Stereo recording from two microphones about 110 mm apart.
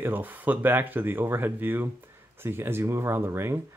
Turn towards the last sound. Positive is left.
turn(degrees=-20)  # may be behind; listen again after turning